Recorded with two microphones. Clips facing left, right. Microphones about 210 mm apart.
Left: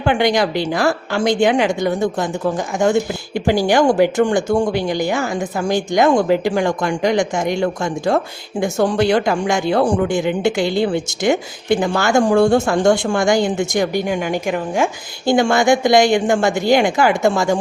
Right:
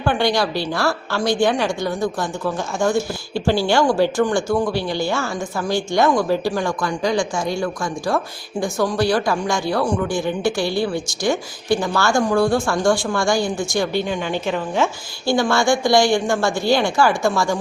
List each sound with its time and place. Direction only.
0.0 s a woman's voice: 20° left (ahead or behind)